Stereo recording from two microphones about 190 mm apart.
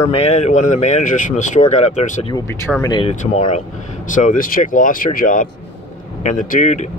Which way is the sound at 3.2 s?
40° left (ahead or behind).